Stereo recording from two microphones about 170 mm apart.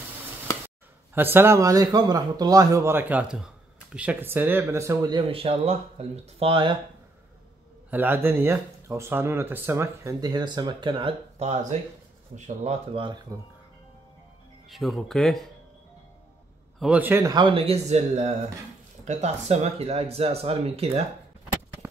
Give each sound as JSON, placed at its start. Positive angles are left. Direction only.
{"t": 1.1, "sound": "speech", "side_deg": -10}
{"t": 7.9, "sound": "speech", "side_deg": -15}
{"t": 14.7, "sound": "speech", "side_deg": 0}
{"t": 16.8, "sound": "speech", "side_deg": -10}